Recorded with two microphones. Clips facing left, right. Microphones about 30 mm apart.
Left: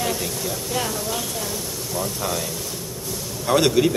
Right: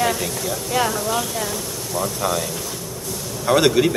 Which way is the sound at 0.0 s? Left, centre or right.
Centre.